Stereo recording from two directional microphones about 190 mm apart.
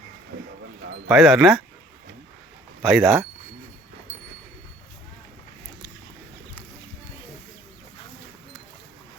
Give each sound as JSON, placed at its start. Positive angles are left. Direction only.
{"t": 0.3, "sound": "a sound", "side_deg": -55}
{"t": 1.0, "sound": "speech", "side_deg": 0}
{"t": 2.8, "sound": "speech", "side_deg": 0}